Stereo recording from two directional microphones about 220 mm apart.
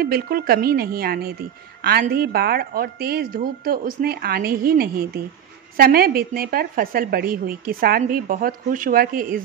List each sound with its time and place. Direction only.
0.0 s a woman's voice: 45° right (ahead or behind)